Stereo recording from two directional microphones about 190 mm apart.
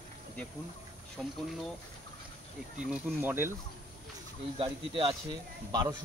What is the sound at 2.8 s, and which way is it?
Speech, 5° right (ahead or behind).